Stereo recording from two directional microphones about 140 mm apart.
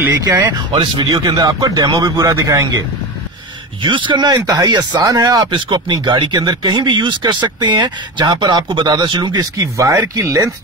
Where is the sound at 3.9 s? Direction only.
35° right (ahead or behind).